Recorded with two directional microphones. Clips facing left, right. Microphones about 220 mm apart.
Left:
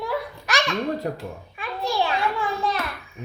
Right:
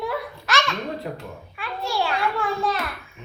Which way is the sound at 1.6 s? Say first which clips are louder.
Left 1 dB; 15° left (ahead or behind).